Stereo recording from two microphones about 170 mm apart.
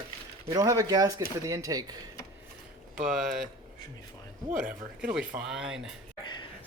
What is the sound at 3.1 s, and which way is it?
Speech, centre (ahead or behind).